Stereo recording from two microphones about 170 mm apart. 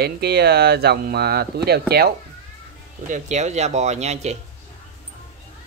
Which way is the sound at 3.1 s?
45° right (ahead or behind).